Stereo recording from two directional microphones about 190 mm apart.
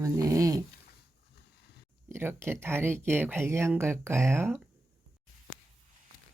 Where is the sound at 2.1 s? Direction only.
10° right (ahead or behind).